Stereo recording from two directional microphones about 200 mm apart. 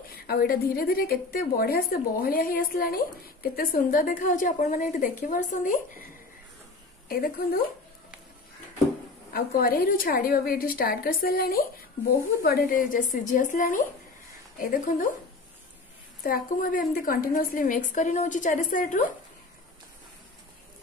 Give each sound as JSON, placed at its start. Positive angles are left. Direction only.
{"t": 0.3, "sound": "a woman's voice", "side_deg": 50}
{"t": 7.1, "sound": "a woman's voice", "side_deg": 50}
{"t": 9.3, "sound": "a woman's voice", "side_deg": 50}
{"t": 16.3, "sound": "a woman's voice", "side_deg": 45}